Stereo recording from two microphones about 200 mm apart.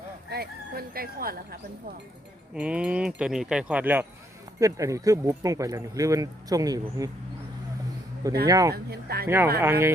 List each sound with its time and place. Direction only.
0.3 s speech: 50° right (ahead or behind)
2.6 s speech: 5° right (ahead or behind)
8.4 s speech: 15° right (ahead or behind)
8.7 s speech: 50° right (ahead or behind)
9.2 s speech: 10° right (ahead or behind)